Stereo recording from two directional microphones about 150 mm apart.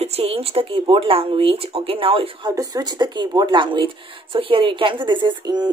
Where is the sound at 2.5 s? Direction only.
25° right (ahead or behind).